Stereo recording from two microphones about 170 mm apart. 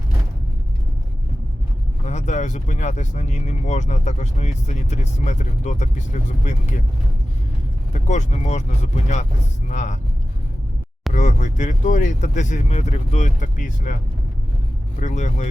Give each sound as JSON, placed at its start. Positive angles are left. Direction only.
{"t": 2.0, "sound": "speech", "side_deg": 45}
{"t": 7.9, "sound": "speech", "side_deg": 45}
{"t": 11.1, "sound": "speech", "side_deg": 45}
{"t": 14.9, "sound": "speech", "side_deg": 45}